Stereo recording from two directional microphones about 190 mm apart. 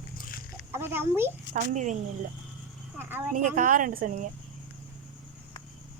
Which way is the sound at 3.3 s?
45° right (ahead or behind).